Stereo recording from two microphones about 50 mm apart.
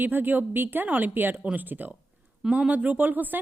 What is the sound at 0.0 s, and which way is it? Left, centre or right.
A woman's voice, right.